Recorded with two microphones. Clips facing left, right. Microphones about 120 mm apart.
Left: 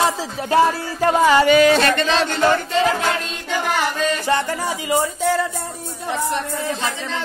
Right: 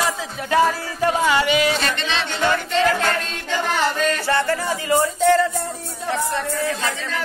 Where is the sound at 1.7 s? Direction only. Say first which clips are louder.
Left 7 dB; 55° left (ahead or behind).